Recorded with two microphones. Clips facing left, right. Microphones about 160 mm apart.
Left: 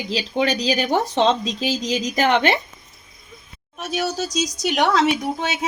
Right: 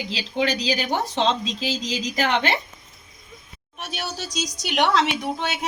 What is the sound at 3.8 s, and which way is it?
A woman's voice, 40° left (ahead or behind).